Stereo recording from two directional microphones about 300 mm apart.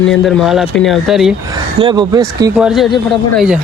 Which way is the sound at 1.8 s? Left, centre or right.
Centre.